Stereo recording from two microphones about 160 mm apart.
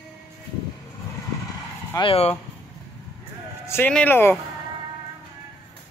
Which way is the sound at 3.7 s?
10° left (ahead or behind).